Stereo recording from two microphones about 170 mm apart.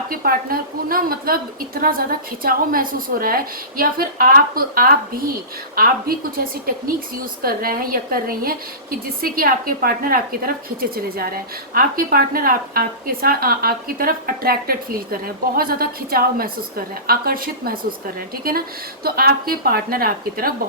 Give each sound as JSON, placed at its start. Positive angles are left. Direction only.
{"t": 0.1, "sound": "a woman's voice", "side_deg": -60}
{"t": 19.0, "sound": "a woman's voice", "side_deg": -65}